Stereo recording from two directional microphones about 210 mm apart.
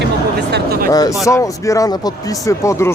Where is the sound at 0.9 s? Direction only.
15° left (ahead or behind).